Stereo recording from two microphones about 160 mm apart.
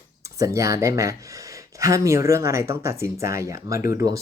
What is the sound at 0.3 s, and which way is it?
Speech, 20° right (ahead or behind).